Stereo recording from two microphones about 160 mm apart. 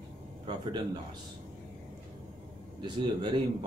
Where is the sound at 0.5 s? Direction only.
30° right (ahead or behind).